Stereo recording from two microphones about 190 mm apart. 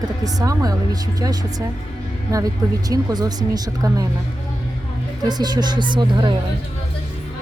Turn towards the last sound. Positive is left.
turn(degrees=-25)  # may be behind; listen again after turning